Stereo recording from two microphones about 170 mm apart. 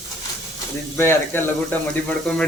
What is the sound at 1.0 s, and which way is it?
Speech, 15° left (ahead or behind).